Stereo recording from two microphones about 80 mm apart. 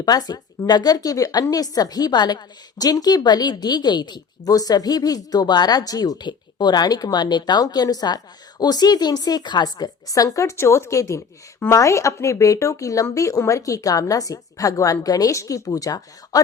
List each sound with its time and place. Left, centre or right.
0.0 s a woman's voice: left